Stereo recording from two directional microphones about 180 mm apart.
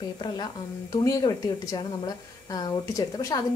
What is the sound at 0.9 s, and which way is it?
A woman's voice, 20° left (ahead or behind).